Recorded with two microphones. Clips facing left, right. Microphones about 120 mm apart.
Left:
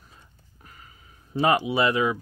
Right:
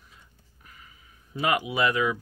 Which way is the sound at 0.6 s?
40° left (ahead or behind).